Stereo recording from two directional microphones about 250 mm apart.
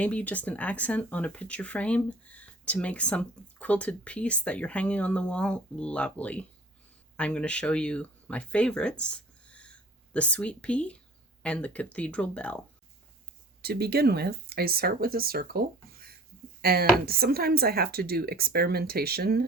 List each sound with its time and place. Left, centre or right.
0.0 s speech: centre
13.6 s speech: right